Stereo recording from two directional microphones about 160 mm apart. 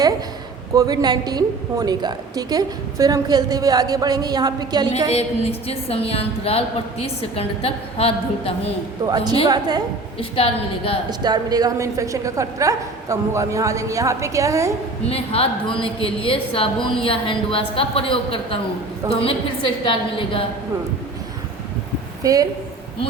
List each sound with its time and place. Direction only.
0.7 s a woman's voice: 20° right (ahead or behind)
5.1 s a woman's voice: 40° left (ahead or behind)
9.0 s a woman's voice: 25° right (ahead or behind)
10.2 s a woman's voice: 35° left (ahead or behind)
11.2 s a woman's voice: 25° right (ahead or behind)
15.1 s a woman's voice: 35° left (ahead or behind)
22.2 s a woman's voice: 20° right (ahead or behind)